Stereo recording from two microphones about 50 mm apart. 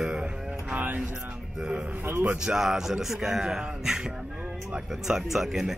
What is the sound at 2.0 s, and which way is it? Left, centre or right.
Speech, right.